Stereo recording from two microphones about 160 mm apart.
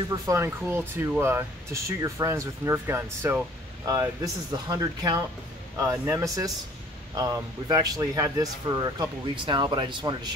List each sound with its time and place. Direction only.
0.3 s speech: 15° right (ahead or behind)